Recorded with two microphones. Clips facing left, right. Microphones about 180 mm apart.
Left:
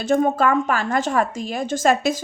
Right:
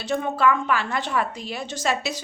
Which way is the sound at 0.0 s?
45° left (ahead or behind).